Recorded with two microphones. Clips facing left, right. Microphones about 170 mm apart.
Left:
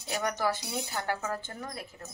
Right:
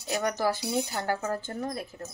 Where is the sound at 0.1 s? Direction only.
40° right (ahead or behind).